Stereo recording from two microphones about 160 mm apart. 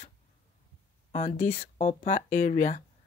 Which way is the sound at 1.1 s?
45° left (ahead or behind).